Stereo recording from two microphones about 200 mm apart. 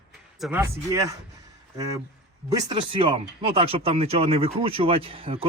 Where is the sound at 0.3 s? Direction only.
Centre (ahead or behind).